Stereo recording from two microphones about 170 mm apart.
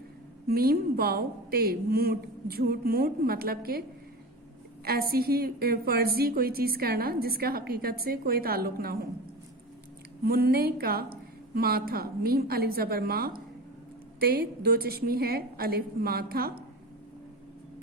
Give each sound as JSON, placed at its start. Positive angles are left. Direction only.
{"t": 0.4, "sound": "a woman's voice", "side_deg": -65}
{"t": 4.9, "sound": "a woman's voice", "side_deg": -65}
{"t": 10.2, "sound": "a woman's voice", "side_deg": -65}